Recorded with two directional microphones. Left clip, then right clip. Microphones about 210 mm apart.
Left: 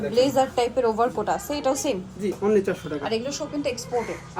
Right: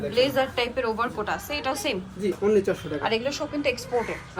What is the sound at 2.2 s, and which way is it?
Speech, centre (ahead or behind).